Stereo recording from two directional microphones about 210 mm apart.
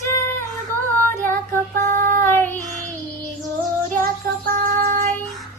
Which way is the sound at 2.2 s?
10° left (ahead or behind).